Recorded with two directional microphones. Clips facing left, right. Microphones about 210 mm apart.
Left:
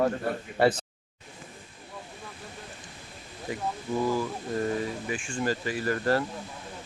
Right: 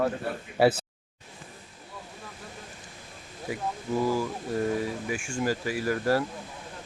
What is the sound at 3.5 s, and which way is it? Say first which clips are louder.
Speech: right 1 dB; 10° right (ahead or behind).